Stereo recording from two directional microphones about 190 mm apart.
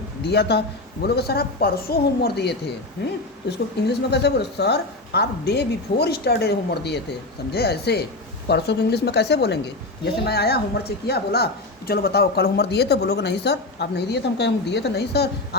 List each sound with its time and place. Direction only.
0.3 s speech: 60° left (ahead or behind)
3.8 s speech: 60° left (ahead or behind)